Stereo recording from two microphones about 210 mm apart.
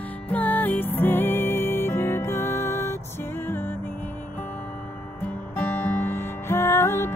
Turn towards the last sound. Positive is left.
turn(degrees=10)  # may be behind; listen again after turning